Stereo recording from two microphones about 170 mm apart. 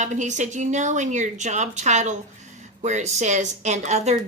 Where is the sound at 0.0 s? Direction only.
45° right (ahead or behind).